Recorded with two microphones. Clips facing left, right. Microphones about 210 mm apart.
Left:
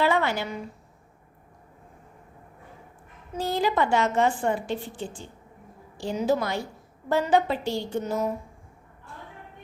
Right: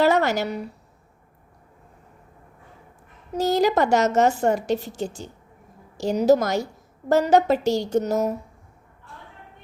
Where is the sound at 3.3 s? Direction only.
40° right (ahead or behind).